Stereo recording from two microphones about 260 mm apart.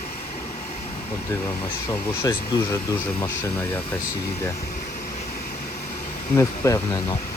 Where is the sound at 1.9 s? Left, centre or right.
Centre.